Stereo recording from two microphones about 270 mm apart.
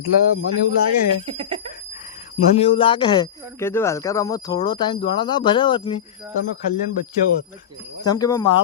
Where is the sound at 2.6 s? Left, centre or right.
Centre.